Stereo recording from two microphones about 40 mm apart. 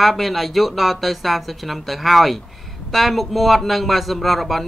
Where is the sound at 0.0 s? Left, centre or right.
Centre.